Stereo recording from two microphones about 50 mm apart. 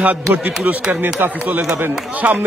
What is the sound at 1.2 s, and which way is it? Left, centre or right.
Speech, right.